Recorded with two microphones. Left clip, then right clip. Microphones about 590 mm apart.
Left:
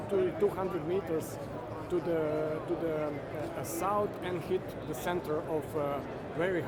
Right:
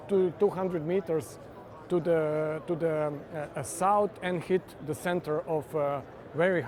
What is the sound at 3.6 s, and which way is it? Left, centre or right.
Speech, right.